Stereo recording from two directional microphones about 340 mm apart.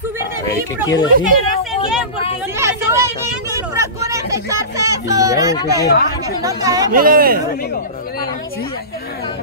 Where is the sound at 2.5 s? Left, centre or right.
Centre.